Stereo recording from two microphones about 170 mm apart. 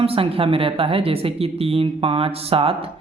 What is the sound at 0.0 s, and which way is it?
Speech, 35° right (ahead or behind).